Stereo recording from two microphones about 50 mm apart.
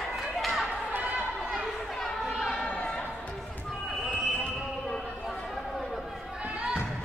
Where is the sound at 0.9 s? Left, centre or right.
Right.